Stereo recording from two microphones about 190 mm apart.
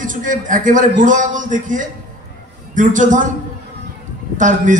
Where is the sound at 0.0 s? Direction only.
45° right (ahead or behind).